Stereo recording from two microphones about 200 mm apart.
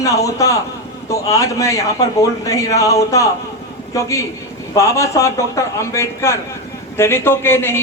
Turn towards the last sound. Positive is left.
turn(degrees=10)  # may be behind; listen again after turning